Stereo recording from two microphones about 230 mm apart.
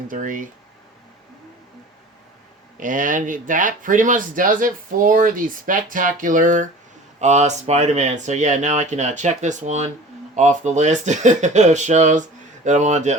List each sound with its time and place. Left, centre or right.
0.1 s speech: right
2.8 s speech: right